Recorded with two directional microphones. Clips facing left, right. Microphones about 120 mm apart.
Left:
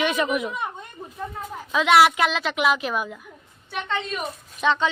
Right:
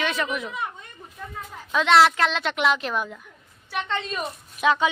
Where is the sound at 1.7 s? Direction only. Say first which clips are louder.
Left 1 dB; 5° left (ahead or behind).